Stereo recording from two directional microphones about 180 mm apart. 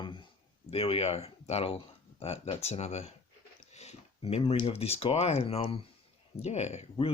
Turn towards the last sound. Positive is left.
turn(degrees=35)  # may be behind; listen again after turning